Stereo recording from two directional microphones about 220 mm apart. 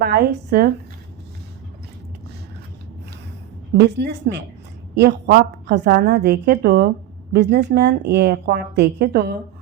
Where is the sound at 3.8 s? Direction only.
50° right (ahead or behind).